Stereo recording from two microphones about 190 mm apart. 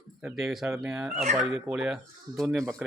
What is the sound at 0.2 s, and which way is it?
Speech, centre (ahead or behind).